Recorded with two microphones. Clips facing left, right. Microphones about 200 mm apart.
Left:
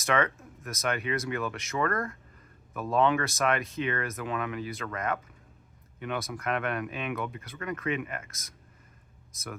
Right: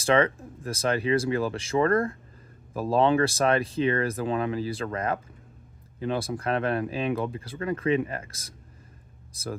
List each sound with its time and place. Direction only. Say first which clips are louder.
0.0 s speech: right 5 dB; 30° right (ahead or behind)